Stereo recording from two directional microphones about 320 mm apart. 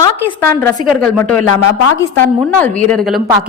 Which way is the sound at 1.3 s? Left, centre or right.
Left.